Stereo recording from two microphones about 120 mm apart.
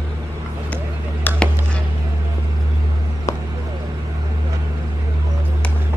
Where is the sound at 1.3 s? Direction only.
15° left (ahead or behind).